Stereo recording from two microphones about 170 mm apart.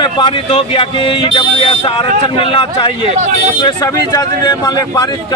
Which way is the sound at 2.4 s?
30° left (ahead or behind).